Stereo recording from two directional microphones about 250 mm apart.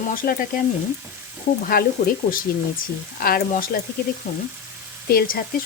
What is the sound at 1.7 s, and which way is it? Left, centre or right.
Speech, left.